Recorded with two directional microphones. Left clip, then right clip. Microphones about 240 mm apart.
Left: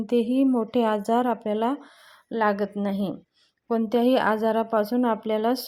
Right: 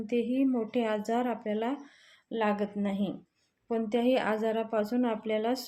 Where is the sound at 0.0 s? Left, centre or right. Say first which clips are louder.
Left 7 dB; left.